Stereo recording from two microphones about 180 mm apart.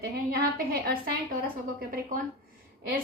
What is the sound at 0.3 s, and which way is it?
Speech, 55° right (ahead or behind).